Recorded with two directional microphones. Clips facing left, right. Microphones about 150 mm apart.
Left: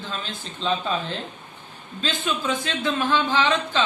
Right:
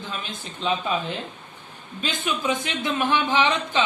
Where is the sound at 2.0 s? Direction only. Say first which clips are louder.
Even; 15° right (ahead or behind).